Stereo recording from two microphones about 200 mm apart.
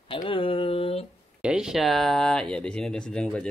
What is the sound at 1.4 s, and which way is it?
Speech, 5° right (ahead or behind).